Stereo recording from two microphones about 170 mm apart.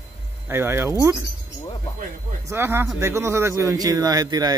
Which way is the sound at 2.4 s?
15° right (ahead or behind).